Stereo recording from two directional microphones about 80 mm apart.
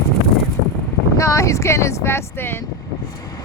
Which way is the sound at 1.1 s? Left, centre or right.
Left.